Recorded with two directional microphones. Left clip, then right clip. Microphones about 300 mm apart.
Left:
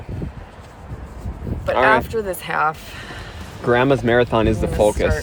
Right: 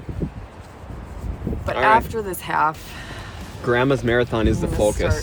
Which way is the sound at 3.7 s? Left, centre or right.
Centre.